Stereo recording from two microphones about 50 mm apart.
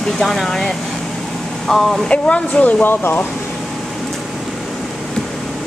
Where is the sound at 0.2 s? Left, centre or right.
Centre.